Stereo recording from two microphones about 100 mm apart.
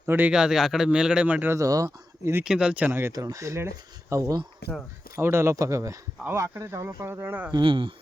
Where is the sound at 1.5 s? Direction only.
35° right (ahead or behind).